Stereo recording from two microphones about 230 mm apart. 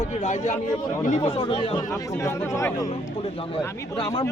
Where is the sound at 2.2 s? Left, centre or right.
Centre.